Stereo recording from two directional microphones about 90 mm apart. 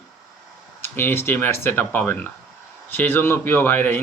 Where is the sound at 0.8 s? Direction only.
25° left (ahead or behind).